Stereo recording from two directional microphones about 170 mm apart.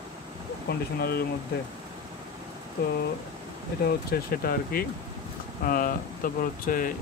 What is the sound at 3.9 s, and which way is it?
Speech, 65° left (ahead or behind).